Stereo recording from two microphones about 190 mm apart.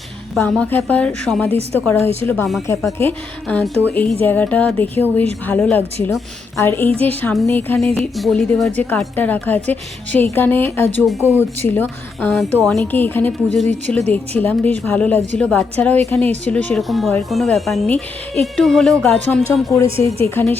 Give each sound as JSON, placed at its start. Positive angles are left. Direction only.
{"t": 0.3, "sound": "a woman's voice", "side_deg": 5}
{"t": 1.5, "sound": "a woman's voice", "side_deg": -35}
{"t": 2.2, "sound": "a woman's voice", "side_deg": 10}
{"t": 19.7, "sound": "a woman's voice", "side_deg": 15}